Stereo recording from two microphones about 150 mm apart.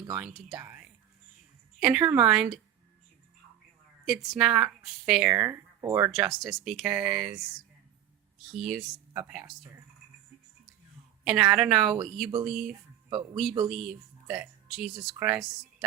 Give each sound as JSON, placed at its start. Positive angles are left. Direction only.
{"t": 0.1, "sound": "a woman's voice", "side_deg": -5}
{"t": 4.0, "sound": "a woman's voice", "side_deg": 0}
{"t": 5.3, "sound": "speech", "side_deg": -15}
{"t": 6.1, "sound": "a woman's voice", "side_deg": 0}
{"t": 8.5, "sound": "a woman's voice", "side_deg": 0}
{"t": 9.1, "sound": "speech", "side_deg": -10}
{"t": 11.2, "sound": "a woman's voice", "side_deg": -5}